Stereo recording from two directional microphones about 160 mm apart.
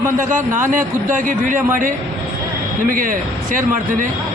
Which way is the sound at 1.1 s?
55° right (ahead or behind).